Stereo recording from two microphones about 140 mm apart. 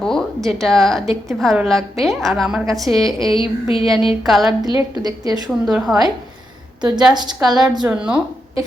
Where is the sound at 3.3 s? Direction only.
40° left (ahead or behind).